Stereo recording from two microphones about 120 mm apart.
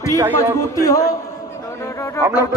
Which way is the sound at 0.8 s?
30° left (ahead or behind).